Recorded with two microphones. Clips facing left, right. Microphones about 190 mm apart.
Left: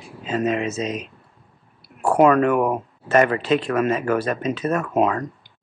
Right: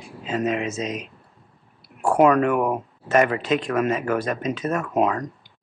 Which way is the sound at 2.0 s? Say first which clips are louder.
Left 1 dB; centre (ahead or behind).